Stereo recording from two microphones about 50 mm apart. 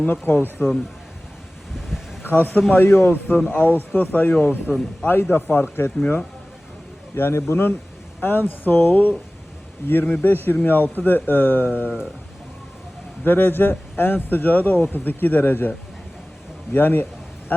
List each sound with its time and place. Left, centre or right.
0.0 s a man's voice: left
2.2 s a man's voice: left
7.2 s speech: left
8.2 s a man's voice: left
13.2 s a man's voice: left
16.7 s a man's voice: left